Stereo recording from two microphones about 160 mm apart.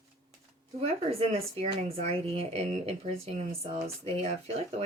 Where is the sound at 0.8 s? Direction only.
40° right (ahead or behind).